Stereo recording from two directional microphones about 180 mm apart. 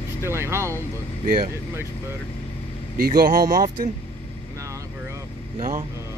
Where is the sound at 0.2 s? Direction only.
15° right (ahead or behind).